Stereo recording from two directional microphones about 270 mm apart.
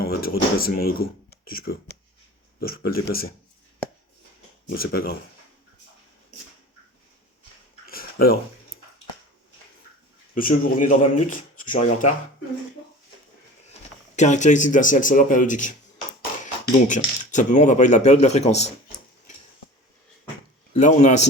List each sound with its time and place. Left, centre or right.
0.0 s speech: left
4.7 s speech: left
7.9 s dishes: left
10.3 s speech: left
14.2 s speech: left
16.9 s speech: left
20.7 s speech: left